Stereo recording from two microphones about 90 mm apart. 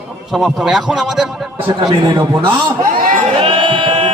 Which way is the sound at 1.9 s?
60° right (ahead or behind).